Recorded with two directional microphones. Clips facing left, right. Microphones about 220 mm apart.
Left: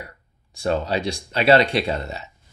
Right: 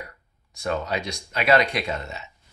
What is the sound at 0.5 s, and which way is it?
Speech, 30° left (ahead or behind).